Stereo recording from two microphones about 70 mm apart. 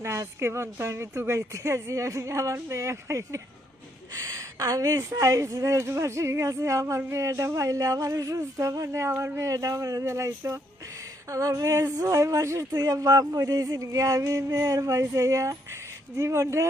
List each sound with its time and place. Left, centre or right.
0.0 s speech: right
9.4 s speech: right